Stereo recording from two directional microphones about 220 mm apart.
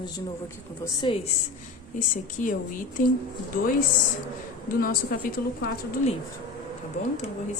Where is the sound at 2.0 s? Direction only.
35° left (ahead or behind).